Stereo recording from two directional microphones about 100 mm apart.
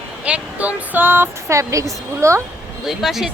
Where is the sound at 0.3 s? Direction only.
15° right (ahead or behind); by 2.4 s 30° right (ahead or behind).